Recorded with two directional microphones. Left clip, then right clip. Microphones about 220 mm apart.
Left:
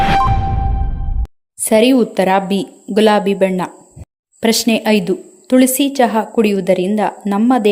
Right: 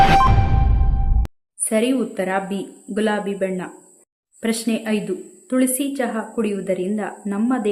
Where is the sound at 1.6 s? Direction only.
25° left (ahead or behind).